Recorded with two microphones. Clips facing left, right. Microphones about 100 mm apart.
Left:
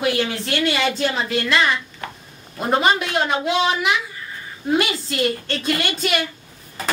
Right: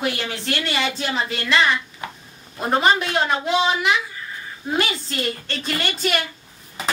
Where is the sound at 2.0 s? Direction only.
15° right (ahead or behind).